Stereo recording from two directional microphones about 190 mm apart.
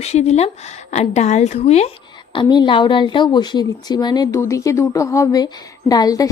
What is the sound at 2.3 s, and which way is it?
Speech, 25° left (ahead or behind).